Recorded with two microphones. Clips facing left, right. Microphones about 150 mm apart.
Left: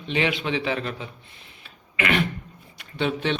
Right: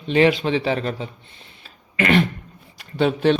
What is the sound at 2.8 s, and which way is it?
Speech, 40° right (ahead or behind).